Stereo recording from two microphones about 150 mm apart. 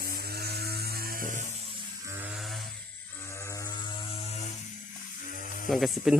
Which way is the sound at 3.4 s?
20° left (ahead or behind).